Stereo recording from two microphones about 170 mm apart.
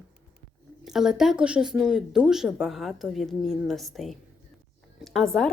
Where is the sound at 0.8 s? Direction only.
5° right (ahead or behind).